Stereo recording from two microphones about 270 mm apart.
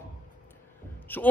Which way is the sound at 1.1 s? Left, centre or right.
Centre.